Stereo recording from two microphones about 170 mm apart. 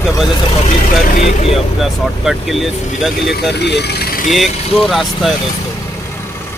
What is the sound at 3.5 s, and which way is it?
Speech, 80° left.